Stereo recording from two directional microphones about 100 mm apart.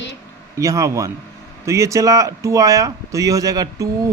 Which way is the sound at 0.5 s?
30° right (ahead or behind).